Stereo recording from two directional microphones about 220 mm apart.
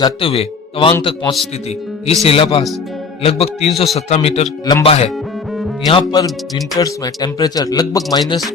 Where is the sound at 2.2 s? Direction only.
25° left (ahead or behind).